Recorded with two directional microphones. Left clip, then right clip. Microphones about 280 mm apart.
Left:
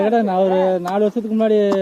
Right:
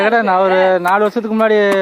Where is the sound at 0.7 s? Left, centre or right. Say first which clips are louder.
Right 6 dB; centre.